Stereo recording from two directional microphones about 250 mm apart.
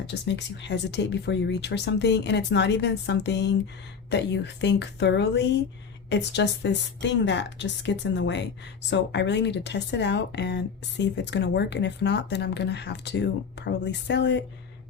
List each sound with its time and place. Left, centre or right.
0.1 s speech: left